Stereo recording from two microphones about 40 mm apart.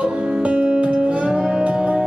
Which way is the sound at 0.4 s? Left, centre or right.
Right.